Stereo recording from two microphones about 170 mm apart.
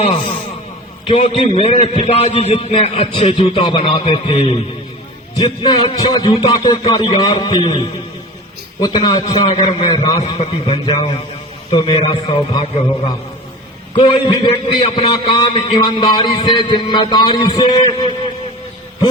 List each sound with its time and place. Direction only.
0.0 s a man's voice: 30° left (ahead or behind)
13.9 s a man's voice: 30° left (ahead or behind)